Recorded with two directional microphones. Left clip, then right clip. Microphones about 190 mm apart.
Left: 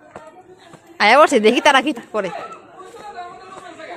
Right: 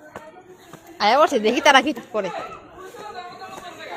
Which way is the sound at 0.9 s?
40° left (ahead or behind).